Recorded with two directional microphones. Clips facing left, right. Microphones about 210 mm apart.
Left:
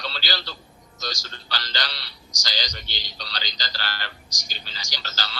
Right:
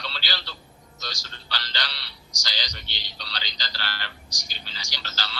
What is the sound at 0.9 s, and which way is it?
A man's voice, 40° left (ahead or behind).